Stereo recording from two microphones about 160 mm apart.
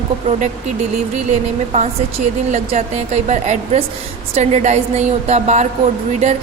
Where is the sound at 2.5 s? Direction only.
45° right (ahead or behind).